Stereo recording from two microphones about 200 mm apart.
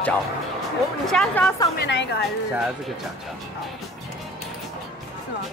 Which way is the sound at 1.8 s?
60° left (ahead or behind).